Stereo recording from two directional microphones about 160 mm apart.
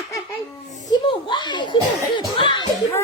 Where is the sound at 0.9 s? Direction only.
30° left (ahead or behind).